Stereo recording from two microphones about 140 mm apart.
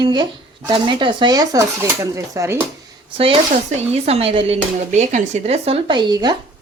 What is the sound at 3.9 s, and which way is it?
Speech, 45° right (ahead or behind).